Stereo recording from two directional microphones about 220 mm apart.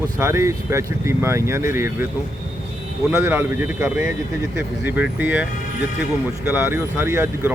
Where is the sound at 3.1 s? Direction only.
10° right (ahead or behind).